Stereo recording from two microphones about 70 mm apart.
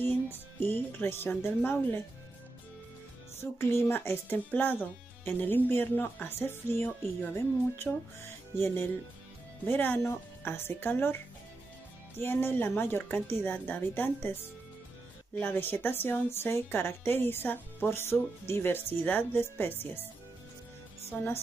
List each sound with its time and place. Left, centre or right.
0.0 s speech: left
3.3 s a woman's voice: left
7.9 s speech: centre
8.5 s a woman's voice: left
12.2 s a woman's voice: left
15.4 s a woman's voice: left
21.1 s a woman's voice: left